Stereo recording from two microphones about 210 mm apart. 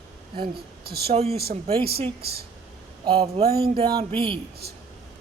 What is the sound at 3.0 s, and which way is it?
Speech, 25° right (ahead or behind).